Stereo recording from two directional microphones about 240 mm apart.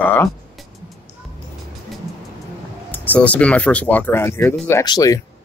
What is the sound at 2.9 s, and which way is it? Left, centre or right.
Speech, centre.